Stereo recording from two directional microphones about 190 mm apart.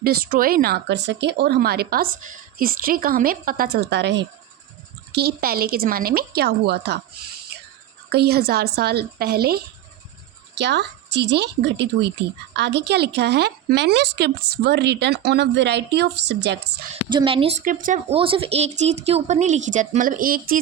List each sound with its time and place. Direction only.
0.0 s speech: 50° right (ahead or behind)
5.1 s speech: 55° right (ahead or behind)
8.1 s a woman's voice: 55° right (ahead or behind)
17.1 s a woman's voice: 25° right (ahead or behind)
17.6 s speech: 45° right (ahead or behind)
18.1 s speech: 30° right (ahead or behind); by 20.4 s 50° right (ahead or behind)